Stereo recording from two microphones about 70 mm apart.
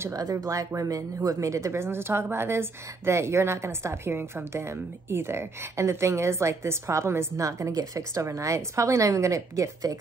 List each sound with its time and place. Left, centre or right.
0.1 s speech: right